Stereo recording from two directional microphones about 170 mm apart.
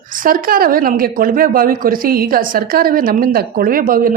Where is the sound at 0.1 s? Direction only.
55° right (ahead or behind).